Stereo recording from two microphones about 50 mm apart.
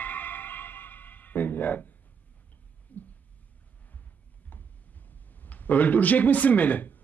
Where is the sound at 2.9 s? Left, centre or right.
Left.